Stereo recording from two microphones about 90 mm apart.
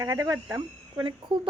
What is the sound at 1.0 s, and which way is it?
Speech, 60° right (ahead or behind).